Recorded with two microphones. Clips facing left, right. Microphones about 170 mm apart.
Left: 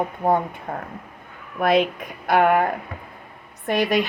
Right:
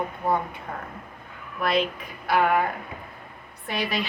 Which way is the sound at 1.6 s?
50° left (ahead or behind).